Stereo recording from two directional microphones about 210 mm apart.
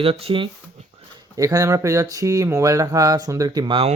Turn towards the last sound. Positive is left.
turn(degrees=-20)  # may be behind; listen again after turning